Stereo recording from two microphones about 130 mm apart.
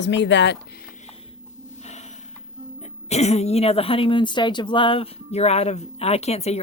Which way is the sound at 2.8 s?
55° left (ahead or behind).